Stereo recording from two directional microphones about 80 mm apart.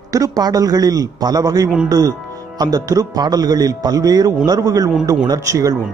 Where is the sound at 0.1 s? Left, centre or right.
Right.